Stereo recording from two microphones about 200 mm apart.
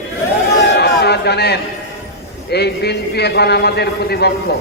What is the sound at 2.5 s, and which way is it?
A man's voice, 55° left (ahead or behind).